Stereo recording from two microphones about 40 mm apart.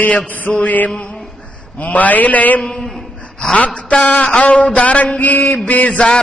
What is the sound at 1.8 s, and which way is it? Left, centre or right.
Speech, left.